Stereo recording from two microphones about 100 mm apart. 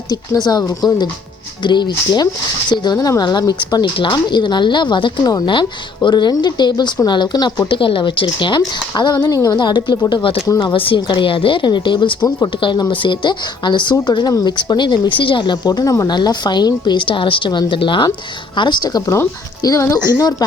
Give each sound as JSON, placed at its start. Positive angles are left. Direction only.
{"t": 0.1, "sound": "speech", "side_deg": 45}
{"t": 7.7, "sound": "speech", "side_deg": 60}
{"t": 10.4, "sound": "speech", "side_deg": 35}
{"t": 10.7, "sound": "a woman's voice", "side_deg": 60}